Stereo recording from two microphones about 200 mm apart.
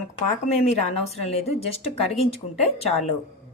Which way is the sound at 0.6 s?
30° left (ahead or behind).